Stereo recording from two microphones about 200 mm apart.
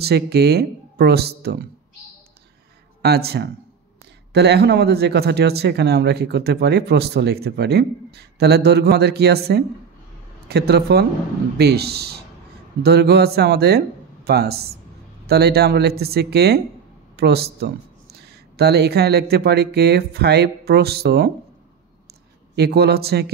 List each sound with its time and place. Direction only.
0.0 s speech: 55° right (ahead or behind)
3.0 s speech: 55° right (ahead or behind)
22.6 s speech: 55° right (ahead or behind)